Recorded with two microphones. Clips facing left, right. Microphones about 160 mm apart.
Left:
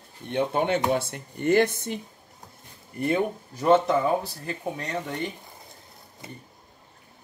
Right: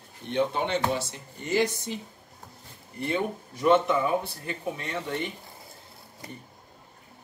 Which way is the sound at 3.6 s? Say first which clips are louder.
Left 2 dB; 40° left (ahead or behind).